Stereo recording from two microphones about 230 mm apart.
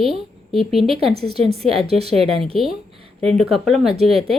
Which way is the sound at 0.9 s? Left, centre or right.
Right.